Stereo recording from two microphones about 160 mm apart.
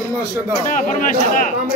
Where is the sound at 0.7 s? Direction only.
55° left (ahead or behind).